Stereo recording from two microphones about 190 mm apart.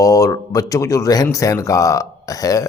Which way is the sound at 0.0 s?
15° left (ahead or behind).